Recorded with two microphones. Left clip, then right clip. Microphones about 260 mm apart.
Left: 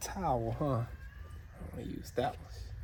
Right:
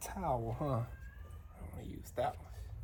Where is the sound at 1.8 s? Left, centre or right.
Left.